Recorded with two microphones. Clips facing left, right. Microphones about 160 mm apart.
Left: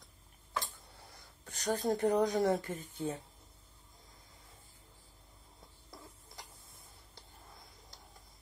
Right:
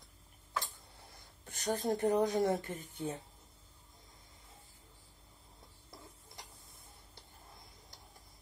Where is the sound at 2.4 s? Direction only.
20° right (ahead or behind).